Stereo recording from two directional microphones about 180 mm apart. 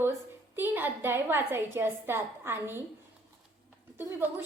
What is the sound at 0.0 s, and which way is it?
A woman's voice, 10° right (ahead or behind).